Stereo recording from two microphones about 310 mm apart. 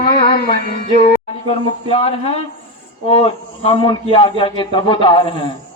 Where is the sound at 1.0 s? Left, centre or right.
Centre.